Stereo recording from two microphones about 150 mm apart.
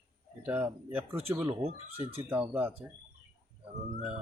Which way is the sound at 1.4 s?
45° right (ahead or behind).